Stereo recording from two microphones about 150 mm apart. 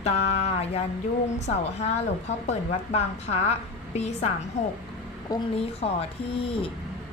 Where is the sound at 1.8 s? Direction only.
45° left (ahead or behind).